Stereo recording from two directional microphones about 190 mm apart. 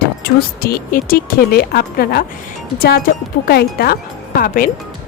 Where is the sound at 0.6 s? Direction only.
50° left (ahead or behind).